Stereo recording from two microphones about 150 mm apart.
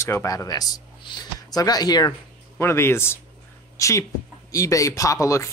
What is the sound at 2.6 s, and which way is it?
A man's voice, 15° left (ahead or behind).